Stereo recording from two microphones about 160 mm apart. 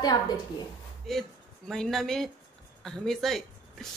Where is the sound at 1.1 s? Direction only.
Centre (ahead or behind).